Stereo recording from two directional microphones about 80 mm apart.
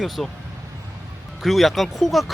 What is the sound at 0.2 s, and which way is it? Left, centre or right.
Speech, centre.